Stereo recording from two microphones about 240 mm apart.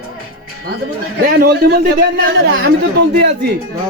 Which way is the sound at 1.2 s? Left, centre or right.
Right.